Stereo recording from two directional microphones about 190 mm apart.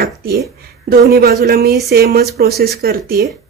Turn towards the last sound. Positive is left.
turn(degrees=-50)  # may be behind; listen again after turning